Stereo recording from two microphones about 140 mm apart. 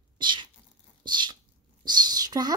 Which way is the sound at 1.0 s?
30° right (ahead or behind).